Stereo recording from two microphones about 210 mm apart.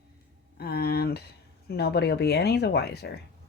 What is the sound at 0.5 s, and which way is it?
Speech, 50° left (ahead or behind).